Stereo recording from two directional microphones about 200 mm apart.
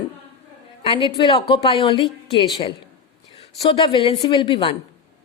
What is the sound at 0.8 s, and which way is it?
A woman's voice, 25° left (ahead or behind).